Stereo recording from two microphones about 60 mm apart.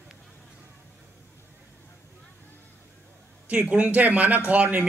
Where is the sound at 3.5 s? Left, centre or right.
Right.